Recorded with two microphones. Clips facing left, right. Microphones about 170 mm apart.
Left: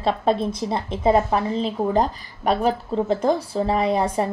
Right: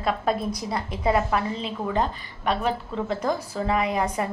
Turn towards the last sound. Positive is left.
turn(degrees=30)  # may be behind; listen again after turning